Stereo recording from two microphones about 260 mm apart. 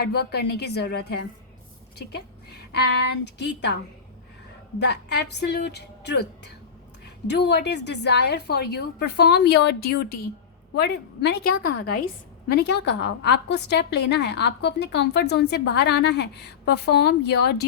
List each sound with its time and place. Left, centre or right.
0.0 s a woman's voice: left
2.7 s a woman's voice: left
4.8 s a woman's voice: left